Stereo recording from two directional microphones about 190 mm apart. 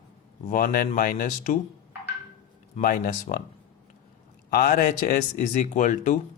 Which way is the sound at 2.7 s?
45° left (ahead or behind).